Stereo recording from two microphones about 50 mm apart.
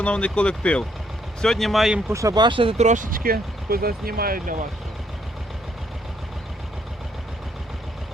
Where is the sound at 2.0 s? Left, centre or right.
Right.